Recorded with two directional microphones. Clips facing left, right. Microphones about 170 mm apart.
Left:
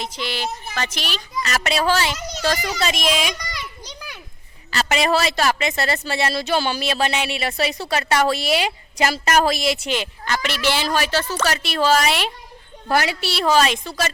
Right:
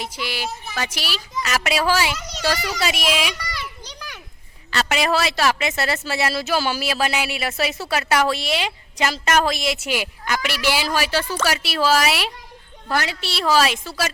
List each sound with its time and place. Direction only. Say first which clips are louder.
0.0 s speech: left 1 dB; 10° right (ahead or behind)
4.7 s speech: left 1 dB; centre (ahead or behind)
8.5 s speech: left 3 dB; 45° left (ahead or behind)
9.5 s speech: left 2 dB; centre (ahead or behind)
12.9 s a woman's voice: left 4 dB; 10° left (ahead or behind)
13.3 s speech: left 1 dB; centre (ahead or behind)